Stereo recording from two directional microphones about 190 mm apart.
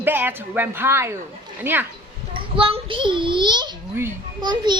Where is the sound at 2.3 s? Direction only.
25° right (ahead or behind).